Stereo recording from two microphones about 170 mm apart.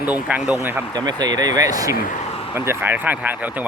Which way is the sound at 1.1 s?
25° right (ahead or behind).